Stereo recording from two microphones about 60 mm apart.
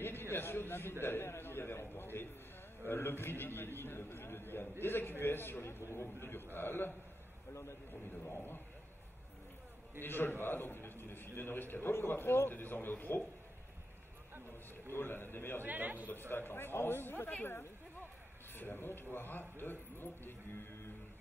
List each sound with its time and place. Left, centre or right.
0.0 s a sound: left
2.9 s a man's voice: left
7.9 s a man's voice: left
10.0 s a man's voice: left
14.9 s a man's voice: left
15.6 s a man's voice: right
16.1 s a man's voice: left